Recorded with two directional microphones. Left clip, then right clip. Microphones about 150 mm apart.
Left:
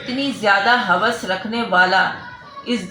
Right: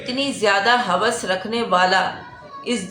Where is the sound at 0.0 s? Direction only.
15° right (ahead or behind).